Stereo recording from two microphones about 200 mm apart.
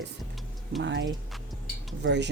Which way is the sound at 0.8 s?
60° right (ahead or behind).